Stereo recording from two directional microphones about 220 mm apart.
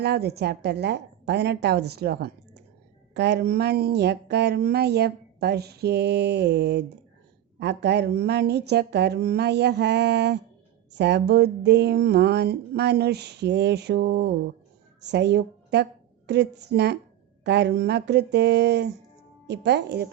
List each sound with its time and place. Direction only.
0.0 s a woman's voice: 50° right (ahead or behind)